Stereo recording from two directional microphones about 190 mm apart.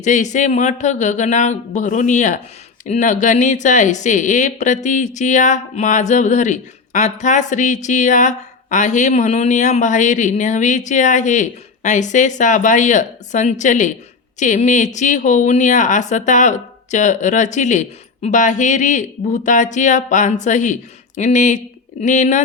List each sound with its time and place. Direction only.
0.0 s speech: 40° left (ahead or behind)